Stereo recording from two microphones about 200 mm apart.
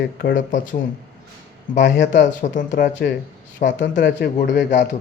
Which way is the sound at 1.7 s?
60° left (ahead or behind).